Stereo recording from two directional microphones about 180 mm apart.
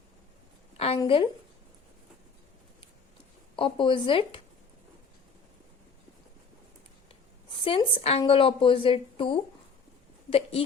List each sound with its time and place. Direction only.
0.8 s a woman's voice: 30° left (ahead or behind)
3.5 s speech: 30° left (ahead or behind)
7.5 s a woman's voice: 30° left (ahead or behind)